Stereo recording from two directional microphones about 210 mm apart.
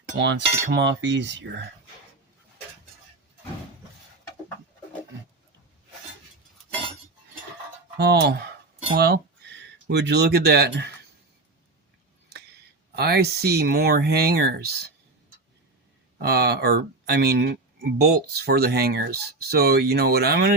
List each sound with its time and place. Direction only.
0.2 s speech: 55° right (ahead or behind)
7.9 s speech: 50° right (ahead or behind)
12.9 s speech: 50° right (ahead or behind)
16.2 s speech: 50° right (ahead or behind)